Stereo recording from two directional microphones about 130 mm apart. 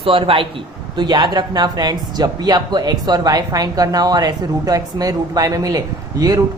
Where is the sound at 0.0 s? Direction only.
45° right (ahead or behind).